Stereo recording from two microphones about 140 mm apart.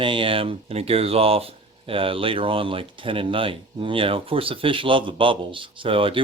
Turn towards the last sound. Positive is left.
turn(degrees=-40)  # may be behind; listen again after turning